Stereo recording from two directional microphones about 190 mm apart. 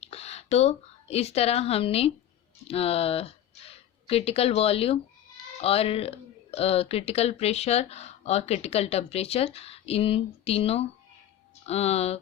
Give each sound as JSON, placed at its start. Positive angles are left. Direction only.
{"t": 0.0, "sound": "speech", "side_deg": 35}